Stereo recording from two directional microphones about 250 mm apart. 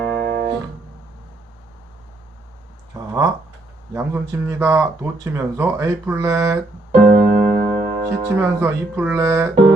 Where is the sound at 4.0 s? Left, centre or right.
Centre.